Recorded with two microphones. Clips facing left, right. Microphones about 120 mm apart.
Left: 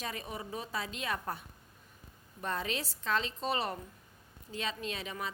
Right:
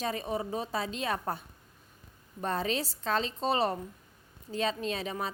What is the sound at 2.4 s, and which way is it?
A woman's voice, 35° right (ahead or behind).